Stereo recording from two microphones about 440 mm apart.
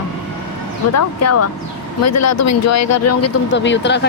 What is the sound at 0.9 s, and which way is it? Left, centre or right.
Speech, left.